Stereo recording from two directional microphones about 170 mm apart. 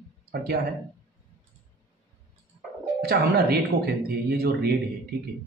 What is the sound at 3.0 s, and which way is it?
A man's voice, 65° right (ahead or behind).